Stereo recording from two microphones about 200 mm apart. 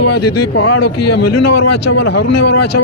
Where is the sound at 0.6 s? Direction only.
90° left.